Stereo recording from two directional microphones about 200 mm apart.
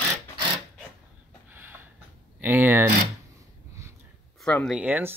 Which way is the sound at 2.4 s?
10° right (ahead or behind).